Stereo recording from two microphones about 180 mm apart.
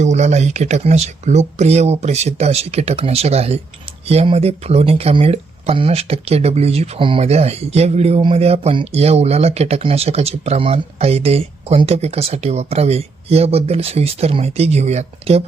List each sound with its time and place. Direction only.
0.0 s speech: 40° right (ahead or behind)